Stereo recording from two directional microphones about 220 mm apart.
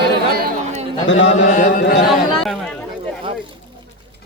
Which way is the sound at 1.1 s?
55° left (ahead or behind).